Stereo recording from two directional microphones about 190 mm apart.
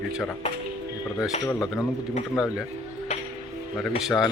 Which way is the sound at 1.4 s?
15° left (ahead or behind).